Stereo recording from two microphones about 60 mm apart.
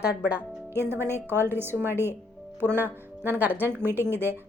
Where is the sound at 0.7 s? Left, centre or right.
Right.